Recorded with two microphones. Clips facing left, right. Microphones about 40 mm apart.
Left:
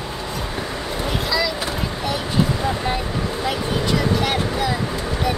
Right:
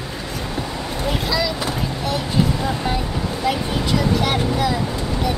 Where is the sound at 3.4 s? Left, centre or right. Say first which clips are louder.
Right 2 dB; centre.